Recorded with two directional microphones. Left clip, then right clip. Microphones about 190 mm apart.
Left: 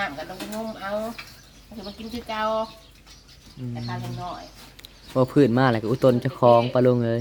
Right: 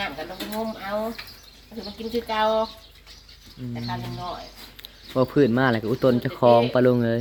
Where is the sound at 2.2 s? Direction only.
25° left (ahead or behind).